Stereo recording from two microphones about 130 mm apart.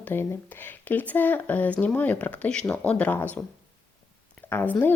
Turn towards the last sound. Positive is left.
turn(degrees=15)  # may be behind; listen again after turning